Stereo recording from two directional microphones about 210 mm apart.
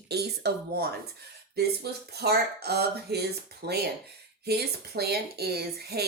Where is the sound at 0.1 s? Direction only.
50° right (ahead or behind).